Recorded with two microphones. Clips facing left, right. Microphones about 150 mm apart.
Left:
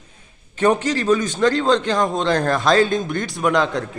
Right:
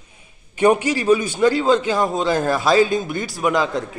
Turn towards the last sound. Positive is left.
turn(degrees=-5)  # may be behind; listen again after turning